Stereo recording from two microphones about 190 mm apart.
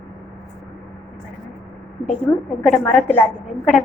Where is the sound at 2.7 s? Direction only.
10° left (ahead or behind).